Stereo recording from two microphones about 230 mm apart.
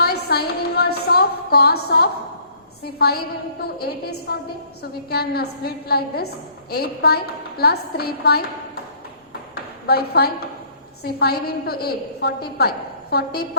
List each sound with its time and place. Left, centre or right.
0.0 s a sound: left
2.8 s a woman's voice: left
9.8 s a woman's voice: left